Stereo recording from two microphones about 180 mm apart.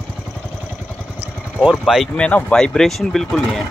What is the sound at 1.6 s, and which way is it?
Speech, centre (ahead or behind).